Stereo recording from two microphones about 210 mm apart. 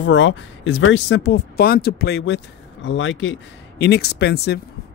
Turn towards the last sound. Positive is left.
turn(degrees=50)  # may be behind; listen again after turning